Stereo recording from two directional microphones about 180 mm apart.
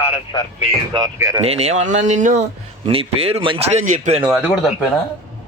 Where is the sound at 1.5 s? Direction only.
35° right (ahead or behind).